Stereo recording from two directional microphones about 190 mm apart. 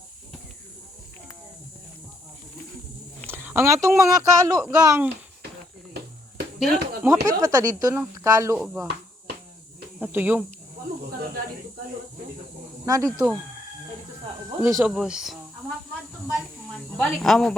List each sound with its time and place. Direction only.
3.2 s speech: 10° right (ahead or behind)
6.6 s speech: 10° right (ahead or behind)
10.0 s speech: 10° right (ahead or behind)
12.8 s speech: 15° right (ahead or behind)
14.6 s speech: 15° right (ahead or behind)
14.9 s speech: 5° right (ahead or behind)
17.0 s speech: 5° left (ahead or behind)